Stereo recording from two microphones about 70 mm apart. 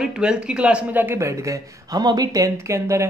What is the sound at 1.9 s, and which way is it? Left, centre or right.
Speech, right.